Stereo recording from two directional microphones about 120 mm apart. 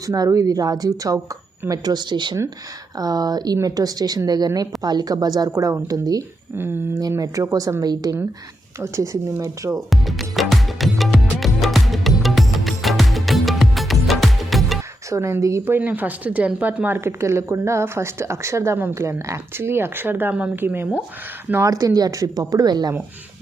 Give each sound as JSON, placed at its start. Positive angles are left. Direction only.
{"t": 0.0, "sound": "a woman's voice", "side_deg": -30}
{"t": 6.6, "sound": "speech", "side_deg": -20}
{"t": 7.2, "sound": "speech", "side_deg": -30}
{"t": 9.9, "sound": "music", "side_deg": 0}
{"t": 15.1, "sound": "speech", "side_deg": -25}
{"t": 15.6, "sound": "a woman's voice", "side_deg": -15}
{"t": 21.5, "sound": "speech", "side_deg": -25}